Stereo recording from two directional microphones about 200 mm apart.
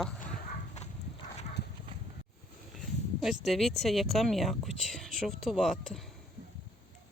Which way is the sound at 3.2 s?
Centre (ahead or behind).